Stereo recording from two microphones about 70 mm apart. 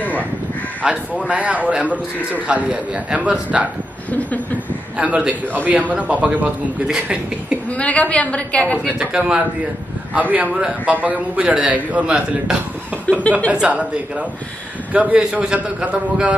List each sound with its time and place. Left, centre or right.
0.0 s crow: left
0.8 s a man's voice: centre
4.9 s a man's voice: centre
5.5 s a man's voice: right
7.7 s a woman's voice: centre
8.8 s a man's voice: centre
13.0 s speech: centre
13.5 s a man's voice: centre
14.9 s a man's voice: centre